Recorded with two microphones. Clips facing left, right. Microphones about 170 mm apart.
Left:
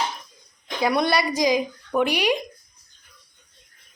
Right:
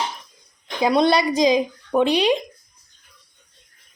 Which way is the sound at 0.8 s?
20° right (ahead or behind).